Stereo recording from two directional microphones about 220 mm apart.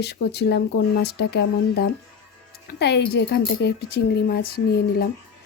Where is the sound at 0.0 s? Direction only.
50° left (ahead or behind).